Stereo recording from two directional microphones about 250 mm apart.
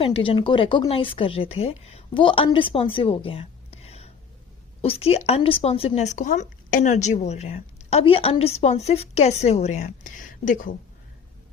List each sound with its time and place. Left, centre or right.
0.0 s speech: left